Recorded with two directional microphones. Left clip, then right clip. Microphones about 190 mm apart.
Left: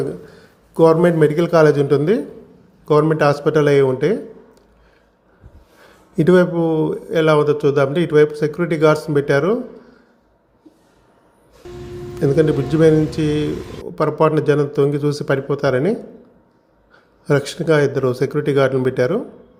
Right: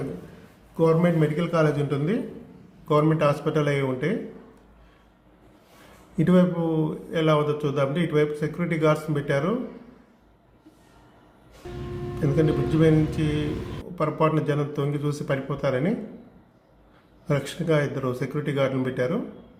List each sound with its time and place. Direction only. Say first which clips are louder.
0.8 s speech: left 9 dB; 40° left (ahead or behind)
6.1 s speech: left 9 dB; 35° left (ahead or behind)
12.2 s speech: left 8 dB; 35° left (ahead or behind)
17.2 s speech: left 9 dB; 35° left (ahead or behind)